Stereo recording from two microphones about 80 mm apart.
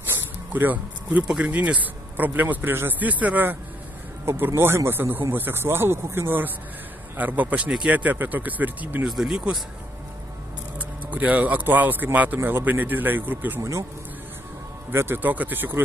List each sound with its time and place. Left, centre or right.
0.1 s a sound: right
1.4 s speech: centre
9.0 s speech: centre
10.8 s a man's voice: centre
13.6 s speech: right
14.9 s speech: right